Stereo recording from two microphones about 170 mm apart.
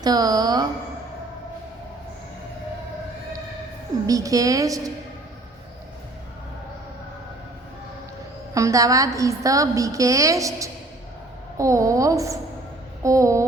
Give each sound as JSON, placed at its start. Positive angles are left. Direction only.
{"t": 0.0, "sound": "a woman's voice", "side_deg": -25}
{"t": 4.0, "sound": "a woman's voice", "side_deg": -20}
{"t": 8.5, "sound": "a woman's voice", "side_deg": -20}
{"t": 13.0, "sound": "a sound", "side_deg": -20}